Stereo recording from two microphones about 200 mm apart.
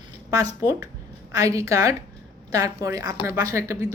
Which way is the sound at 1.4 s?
15° right (ahead or behind).